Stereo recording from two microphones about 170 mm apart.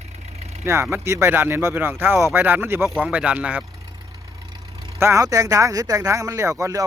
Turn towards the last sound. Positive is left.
turn(degrees=-20)  # may be behind; listen again after turning